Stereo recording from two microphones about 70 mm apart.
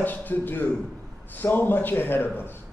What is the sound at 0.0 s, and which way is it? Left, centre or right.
A man's voice, left.